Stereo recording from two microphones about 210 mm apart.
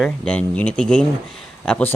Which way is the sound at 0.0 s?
5° left (ahead or behind).